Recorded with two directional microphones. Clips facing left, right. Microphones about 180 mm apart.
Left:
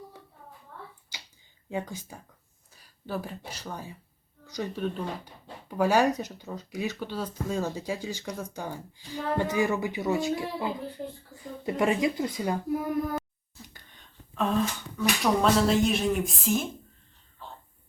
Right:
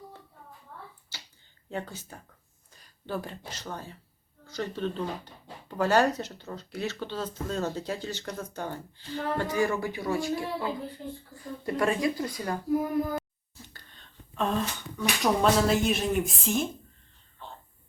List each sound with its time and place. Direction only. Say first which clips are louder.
1.1 s finger snapping: left 1 dB; 15° left (ahead or behind)
1.7 s speech: left 2 dB; 15° left (ahead or behind)
14.3 s speech: left 2 dB; centre (ahead or behind)